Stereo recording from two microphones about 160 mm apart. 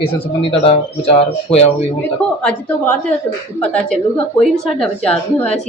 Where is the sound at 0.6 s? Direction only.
35° left (ahead or behind).